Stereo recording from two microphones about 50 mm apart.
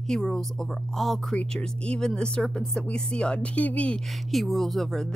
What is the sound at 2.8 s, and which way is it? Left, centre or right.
Speech, centre.